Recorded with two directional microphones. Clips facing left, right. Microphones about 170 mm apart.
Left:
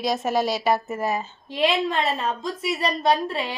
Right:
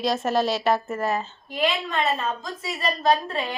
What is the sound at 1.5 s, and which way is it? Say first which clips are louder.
Speech: left 3 dB; 30° left (ahead or behind).